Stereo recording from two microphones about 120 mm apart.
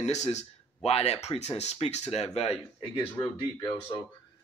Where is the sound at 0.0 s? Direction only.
70° left (ahead or behind).